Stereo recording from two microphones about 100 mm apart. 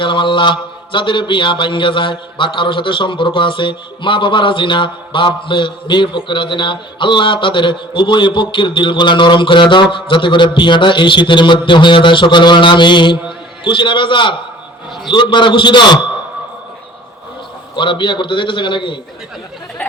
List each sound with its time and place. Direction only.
0.0 s a man's voice: 55° left (ahead or behind)
17.7 s a man's voice: 55° left (ahead or behind)